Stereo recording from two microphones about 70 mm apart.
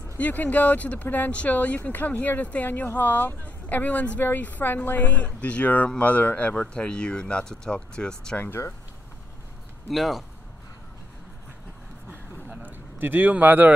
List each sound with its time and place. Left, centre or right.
0.2 s speech: left
9.8 s speech: centre
12.1 s a sound: right